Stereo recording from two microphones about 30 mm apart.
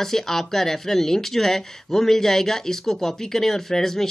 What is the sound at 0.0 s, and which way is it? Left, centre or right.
Speech, centre.